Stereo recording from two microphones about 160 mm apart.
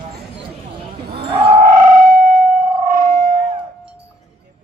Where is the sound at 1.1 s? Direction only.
35° right (ahead or behind).